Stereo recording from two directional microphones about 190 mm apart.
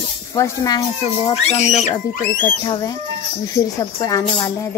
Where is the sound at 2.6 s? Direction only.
25° left (ahead or behind).